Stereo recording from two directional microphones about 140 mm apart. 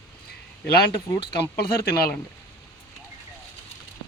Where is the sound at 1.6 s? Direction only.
90° left.